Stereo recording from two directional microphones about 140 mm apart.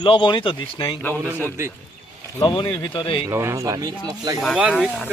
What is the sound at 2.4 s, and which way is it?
Speech, 30° left (ahead or behind).